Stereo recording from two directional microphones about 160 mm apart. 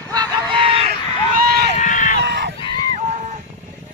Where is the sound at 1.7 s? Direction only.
50° left (ahead or behind).